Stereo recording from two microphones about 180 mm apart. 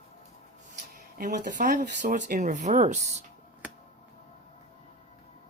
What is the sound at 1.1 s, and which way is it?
Speech, 45° right (ahead or behind).